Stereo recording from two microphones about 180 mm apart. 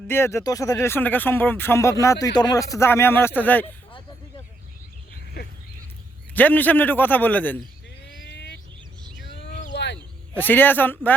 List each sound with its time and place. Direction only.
0.1 s speech: 15° left (ahead or behind)
6.3 s speech: 10° left (ahead or behind)
8.3 s vehicle: 70° left (ahead or behind)
9.1 s a sound: 70° left (ahead or behind)
10.3 s speech: 10° left (ahead or behind)